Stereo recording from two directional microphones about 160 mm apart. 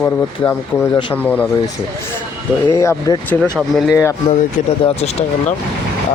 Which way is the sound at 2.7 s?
20° left (ahead or behind).